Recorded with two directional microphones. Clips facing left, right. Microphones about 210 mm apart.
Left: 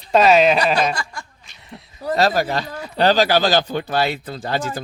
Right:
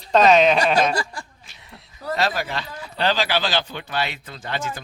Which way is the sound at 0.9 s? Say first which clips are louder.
Right 2 dB; 35° right (ahead or behind).